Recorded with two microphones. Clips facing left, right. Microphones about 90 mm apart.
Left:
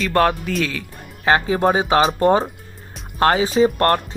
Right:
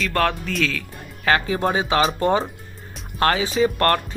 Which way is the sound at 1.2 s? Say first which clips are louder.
Left 3 dB; 30° left (ahead or behind).